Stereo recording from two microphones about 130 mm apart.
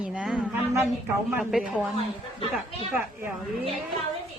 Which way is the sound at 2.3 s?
45° left (ahead or behind).